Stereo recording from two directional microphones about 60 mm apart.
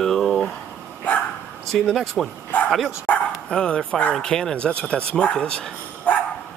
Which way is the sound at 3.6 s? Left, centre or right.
Centre.